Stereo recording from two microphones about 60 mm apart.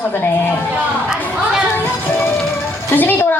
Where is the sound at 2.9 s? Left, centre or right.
Left.